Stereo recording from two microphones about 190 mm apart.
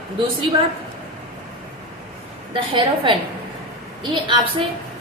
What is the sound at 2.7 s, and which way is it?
Speech, 25° right (ahead or behind).